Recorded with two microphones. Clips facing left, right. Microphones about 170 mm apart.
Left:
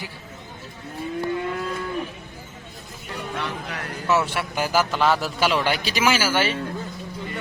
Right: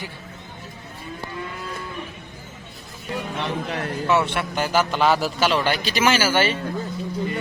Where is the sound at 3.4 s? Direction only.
25° right (ahead or behind).